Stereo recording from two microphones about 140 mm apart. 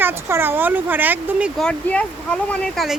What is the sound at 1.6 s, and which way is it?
Speech, 10° left (ahead or behind).